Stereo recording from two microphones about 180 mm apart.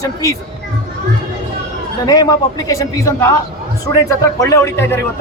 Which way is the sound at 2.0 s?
20° left (ahead or behind).